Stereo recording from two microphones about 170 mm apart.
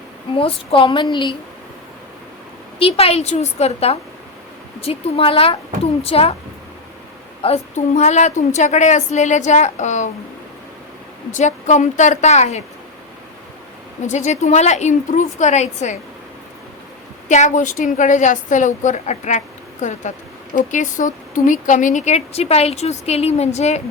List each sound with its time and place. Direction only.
0.3 s speech: 30° left (ahead or behind)
2.7 s a woman's voice: 35° left (ahead or behind)
7.4 s a woman's voice: 40° left (ahead or behind)
11.3 s a woman's voice: 45° left (ahead or behind)
14.1 s a woman's voice: 40° left (ahead or behind)
17.2 s a woman's voice: 45° left (ahead or behind)